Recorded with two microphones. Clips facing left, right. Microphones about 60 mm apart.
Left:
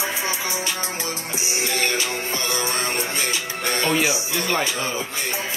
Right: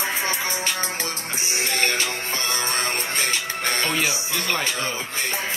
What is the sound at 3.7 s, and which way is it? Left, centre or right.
Speech, centre.